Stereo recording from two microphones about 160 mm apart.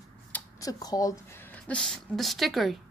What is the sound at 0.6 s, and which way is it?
A woman's voice, 25° left (ahead or behind).